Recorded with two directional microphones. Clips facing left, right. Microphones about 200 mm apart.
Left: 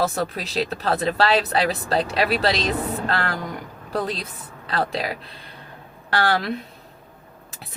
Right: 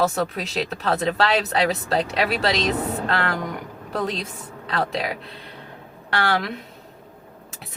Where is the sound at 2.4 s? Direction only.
Centre (ahead or behind).